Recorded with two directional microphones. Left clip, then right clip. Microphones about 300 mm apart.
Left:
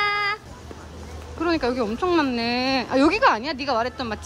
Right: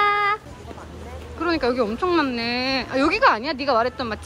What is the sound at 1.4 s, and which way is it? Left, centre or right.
Speech, centre.